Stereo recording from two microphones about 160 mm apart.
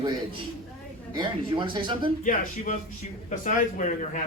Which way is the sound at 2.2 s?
55° left (ahead or behind).